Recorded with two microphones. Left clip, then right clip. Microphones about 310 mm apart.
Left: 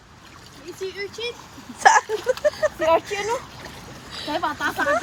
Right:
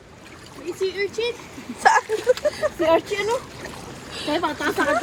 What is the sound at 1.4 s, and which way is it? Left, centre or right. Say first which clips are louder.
Vehicle: left 1 dB; left.